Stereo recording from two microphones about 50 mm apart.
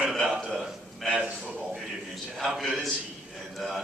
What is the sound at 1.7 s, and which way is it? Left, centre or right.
A man's voice, centre.